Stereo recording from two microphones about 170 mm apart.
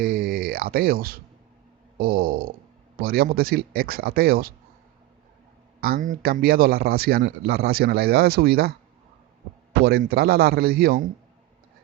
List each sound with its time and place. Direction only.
0.0 s a man's voice: 60° right (ahead or behind)
5.8 s a man's voice: 55° right (ahead or behind)
9.8 s a man's voice: 65° right (ahead or behind)